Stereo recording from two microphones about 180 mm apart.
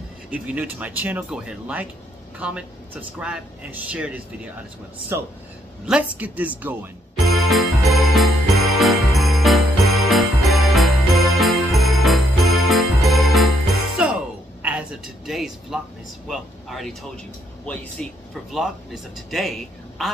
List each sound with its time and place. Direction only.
0.3 s speech: 5° right (ahead or behind)
7.2 s music: centre (ahead or behind)
14.6 s a sound: 5° right (ahead or behind)
16.3 s speech: centre (ahead or behind)